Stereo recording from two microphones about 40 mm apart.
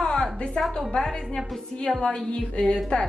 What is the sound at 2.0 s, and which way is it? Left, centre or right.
Speech, left.